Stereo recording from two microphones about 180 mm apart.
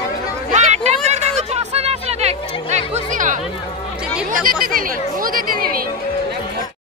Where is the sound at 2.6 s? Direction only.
45° right (ahead or behind).